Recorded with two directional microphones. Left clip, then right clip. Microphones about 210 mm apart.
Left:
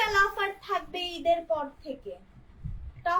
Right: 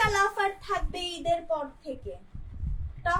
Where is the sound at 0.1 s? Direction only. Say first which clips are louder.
Even; 25° right (ahead or behind).